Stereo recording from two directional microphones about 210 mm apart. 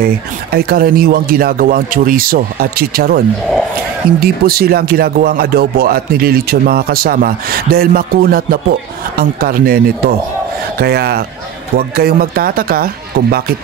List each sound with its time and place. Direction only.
0.0 s speech: 45° right (ahead or behind)
4.2 s speech: 45° right (ahead or behind)